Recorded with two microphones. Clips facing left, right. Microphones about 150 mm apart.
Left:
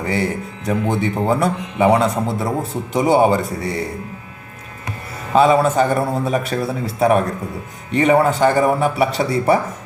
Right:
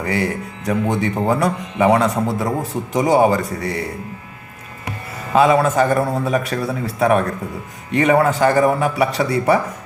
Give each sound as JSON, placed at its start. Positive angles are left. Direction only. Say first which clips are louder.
{"t": 0.0, "sound": "a man's voice", "louder": "even", "side_deg": 30}
{"t": 5.3, "sound": "a man's voice", "louder": "left 1 dB", "side_deg": 30}